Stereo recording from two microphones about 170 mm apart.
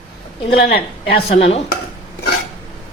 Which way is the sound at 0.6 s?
70° left (ahead or behind).